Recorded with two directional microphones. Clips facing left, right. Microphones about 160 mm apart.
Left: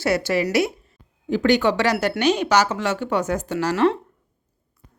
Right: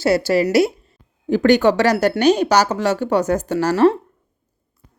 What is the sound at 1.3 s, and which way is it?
Speech, 45° right (ahead or behind).